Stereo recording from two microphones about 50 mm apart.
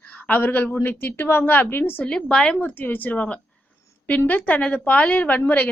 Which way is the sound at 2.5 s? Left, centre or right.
Left.